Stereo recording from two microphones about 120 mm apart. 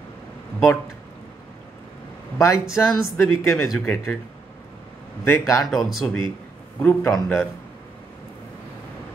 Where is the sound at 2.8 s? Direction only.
25° left (ahead or behind).